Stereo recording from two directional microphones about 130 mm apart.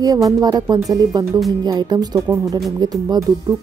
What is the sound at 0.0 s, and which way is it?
Speech, 30° right (ahead or behind).